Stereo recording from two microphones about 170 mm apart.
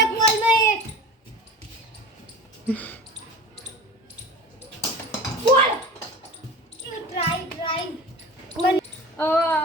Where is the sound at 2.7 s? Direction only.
10° left (ahead or behind).